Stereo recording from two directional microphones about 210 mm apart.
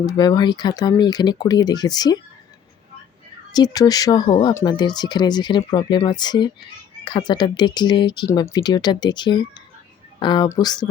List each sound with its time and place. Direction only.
0.0 s speech: 20° left (ahead or behind)
3.5 s speech: 20° left (ahead or behind)